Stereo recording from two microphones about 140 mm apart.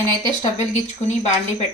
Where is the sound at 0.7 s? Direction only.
50° left (ahead or behind).